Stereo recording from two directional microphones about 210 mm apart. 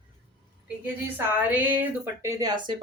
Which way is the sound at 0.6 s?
10° right (ahead or behind).